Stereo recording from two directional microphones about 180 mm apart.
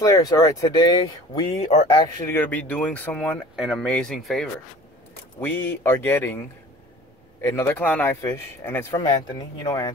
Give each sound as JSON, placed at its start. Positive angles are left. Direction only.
{"t": 0.0, "sound": "speech", "side_deg": 20}
{"t": 7.4, "sound": "speech", "side_deg": 15}